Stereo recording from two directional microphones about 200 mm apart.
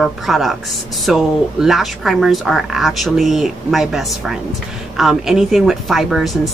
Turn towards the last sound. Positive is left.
turn(degrees=0)  # may be behind; listen again after turning